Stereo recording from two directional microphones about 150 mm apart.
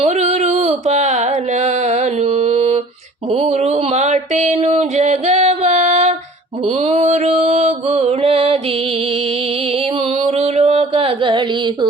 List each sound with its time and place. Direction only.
0.0 s mantra: 45° right (ahead or behind)
9.7 s music: 40° right (ahead or behind)